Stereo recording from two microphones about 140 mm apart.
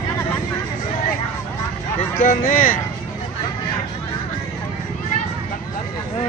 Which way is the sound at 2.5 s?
75° left (ahead or behind).